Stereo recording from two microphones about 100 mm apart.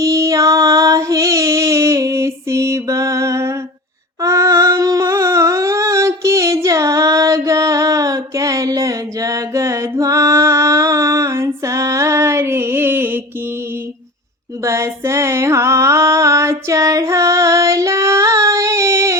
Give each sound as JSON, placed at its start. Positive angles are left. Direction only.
{"t": 0.0, "sound": "child singing", "side_deg": -30}
{"t": 4.2, "sound": "humming", "side_deg": -30}
{"t": 14.6, "sound": "female singing", "side_deg": -30}